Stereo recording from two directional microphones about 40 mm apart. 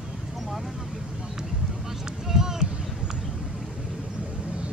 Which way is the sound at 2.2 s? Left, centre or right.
Centre.